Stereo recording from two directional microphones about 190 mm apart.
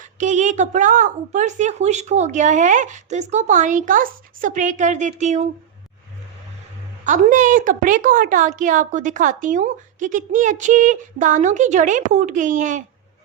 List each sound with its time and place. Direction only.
0.0 s a woman's voice: 40° right (ahead or behind)
7.0 s a woman's voice: 40° right (ahead or behind)